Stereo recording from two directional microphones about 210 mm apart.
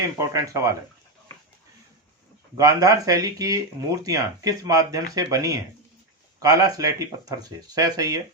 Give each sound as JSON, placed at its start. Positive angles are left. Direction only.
{"t": 0.2, "sound": "speech", "side_deg": -15}
{"t": 2.6, "sound": "speech", "side_deg": -15}